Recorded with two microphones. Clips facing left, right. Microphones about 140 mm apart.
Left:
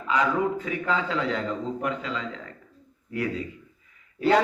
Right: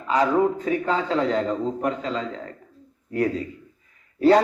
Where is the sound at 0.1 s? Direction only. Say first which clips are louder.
Right 4 dB; 35° right (ahead or behind).